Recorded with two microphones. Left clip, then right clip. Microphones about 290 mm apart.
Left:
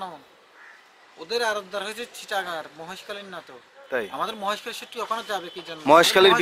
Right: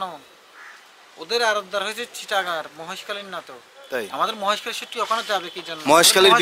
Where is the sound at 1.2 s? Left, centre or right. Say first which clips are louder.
Right 4 dB; centre.